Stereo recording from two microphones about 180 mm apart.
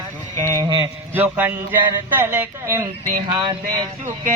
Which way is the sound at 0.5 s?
25° right (ahead or behind).